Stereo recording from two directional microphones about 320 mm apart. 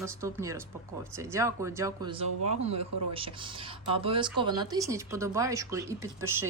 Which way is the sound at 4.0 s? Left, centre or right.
Centre.